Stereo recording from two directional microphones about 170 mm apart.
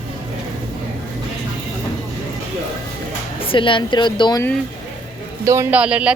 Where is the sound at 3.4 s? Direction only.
30° left (ahead or behind).